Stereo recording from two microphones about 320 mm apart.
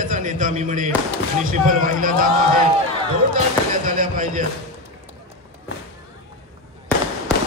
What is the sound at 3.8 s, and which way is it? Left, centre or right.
Speech, right.